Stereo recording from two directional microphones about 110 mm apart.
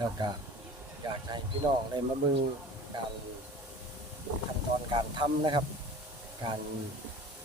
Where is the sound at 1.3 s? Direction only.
45° right (ahead or behind).